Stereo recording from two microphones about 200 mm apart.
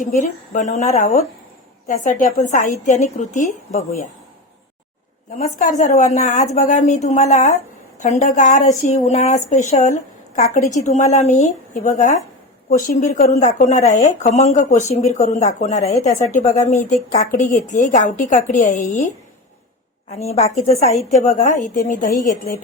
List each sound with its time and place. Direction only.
0.0 s a woman's voice: 40° left (ahead or behind)
5.4 s a woman's voice: 40° left (ahead or behind)
15.8 s speech: 15° left (ahead or behind)
16.5 s a woman's voice: 35° left (ahead or behind)
20.1 s a woman's voice: 30° left (ahead or behind)